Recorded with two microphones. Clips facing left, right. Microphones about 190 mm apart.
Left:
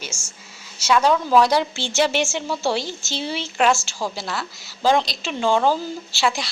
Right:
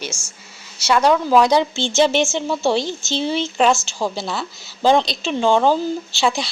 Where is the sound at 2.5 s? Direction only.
20° right (ahead or behind).